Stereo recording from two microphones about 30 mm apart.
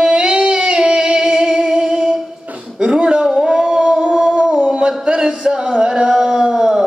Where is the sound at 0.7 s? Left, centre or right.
Right.